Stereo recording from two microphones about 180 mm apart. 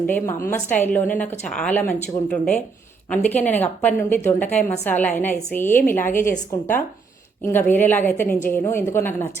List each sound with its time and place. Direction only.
0.8 s speech: 10° left (ahead or behind)